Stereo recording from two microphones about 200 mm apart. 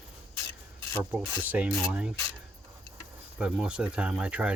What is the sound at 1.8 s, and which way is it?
Speech, 5° right (ahead or behind).